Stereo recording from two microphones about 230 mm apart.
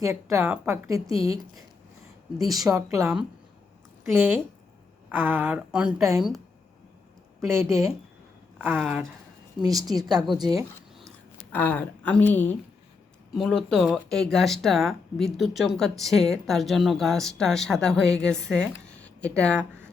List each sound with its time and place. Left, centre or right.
0.0 s a woman's voice: centre
1.1 s speech: left
2.6 s a woman's voice: centre
5.1 s a woman's voice: centre
7.4 s a woman's voice: centre
9.6 s speech: centre
10.2 s speech: centre
10.4 s a woman's voice: centre
11.5 s a woman's voice: centre